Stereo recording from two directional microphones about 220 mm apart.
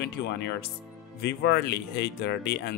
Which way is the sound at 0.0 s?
50° left (ahead or behind).